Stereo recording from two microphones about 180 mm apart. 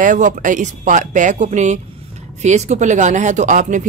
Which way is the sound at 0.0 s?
45° right (ahead or behind).